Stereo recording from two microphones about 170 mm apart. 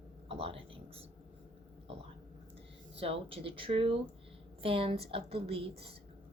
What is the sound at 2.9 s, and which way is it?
A woman's voice, 35° right (ahead or behind).